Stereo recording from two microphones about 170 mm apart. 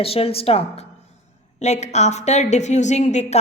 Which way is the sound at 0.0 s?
35° left (ahead or behind).